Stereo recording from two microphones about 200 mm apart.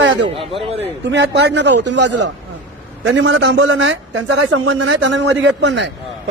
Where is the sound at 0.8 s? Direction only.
65° right (ahead or behind).